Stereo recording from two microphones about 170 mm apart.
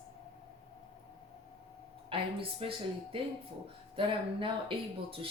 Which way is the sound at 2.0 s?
30° right (ahead or behind).